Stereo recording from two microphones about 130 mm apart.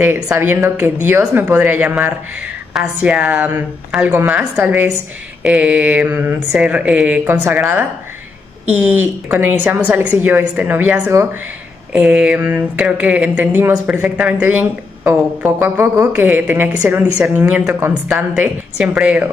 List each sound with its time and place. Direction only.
0.0 s a woman's voice: 15° right (ahead or behind)
18.1 s speech: 10° right (ahead or behind)